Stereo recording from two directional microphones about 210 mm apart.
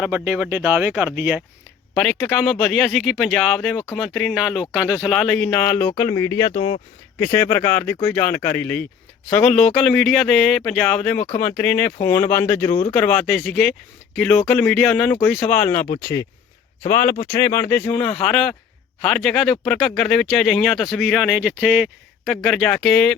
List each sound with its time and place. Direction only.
0.0 s speech: 10° right (ahead or behind)
6.0 s speech: 15° left (ahead or behind)
16.9 s speech: 10° left (ahead or behind)